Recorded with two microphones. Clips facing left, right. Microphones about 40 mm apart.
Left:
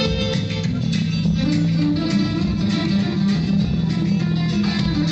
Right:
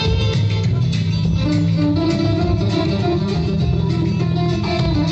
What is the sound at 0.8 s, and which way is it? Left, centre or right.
Music, right.